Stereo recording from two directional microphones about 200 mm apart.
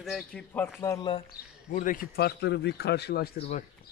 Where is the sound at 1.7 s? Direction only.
45° left (ahead or behind).